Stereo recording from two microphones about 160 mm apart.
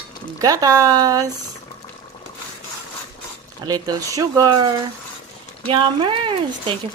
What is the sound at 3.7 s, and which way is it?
Speech, 25° right (ahead or behind).